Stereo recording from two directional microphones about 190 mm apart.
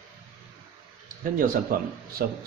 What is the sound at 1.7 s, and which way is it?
Speech, 45° right (ahead or behind).